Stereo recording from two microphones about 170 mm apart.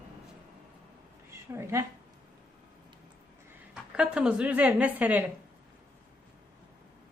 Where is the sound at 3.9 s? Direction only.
5° right (ahead or behind).